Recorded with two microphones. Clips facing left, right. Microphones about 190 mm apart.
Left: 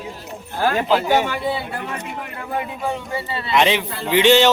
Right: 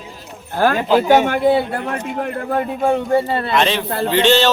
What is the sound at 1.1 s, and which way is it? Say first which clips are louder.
A man's voice: right 6 dB; 55° right (ahead or behind).